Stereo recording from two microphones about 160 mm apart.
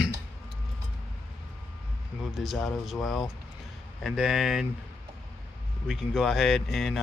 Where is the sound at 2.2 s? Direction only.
Centre (ahead or behind).